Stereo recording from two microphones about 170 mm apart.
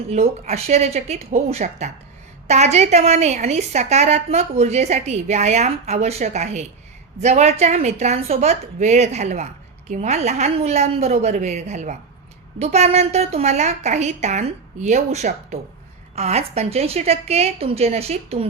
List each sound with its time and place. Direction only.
0.1 s a woman's voice: 40° right (ahead or behind)